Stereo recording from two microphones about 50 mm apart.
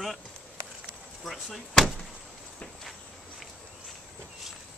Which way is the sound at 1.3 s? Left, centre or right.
Centre.